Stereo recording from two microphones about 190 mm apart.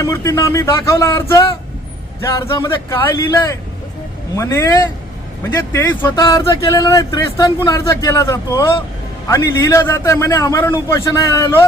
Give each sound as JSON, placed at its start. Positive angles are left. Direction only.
{"t": 0.0, "sound": "speech", "side_deg": 15}